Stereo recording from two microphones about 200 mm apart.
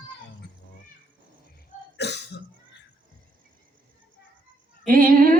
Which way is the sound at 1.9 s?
60° left (ahead or behind).